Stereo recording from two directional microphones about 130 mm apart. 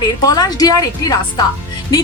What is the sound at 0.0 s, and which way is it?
Speech, 30° left (ahead or behind).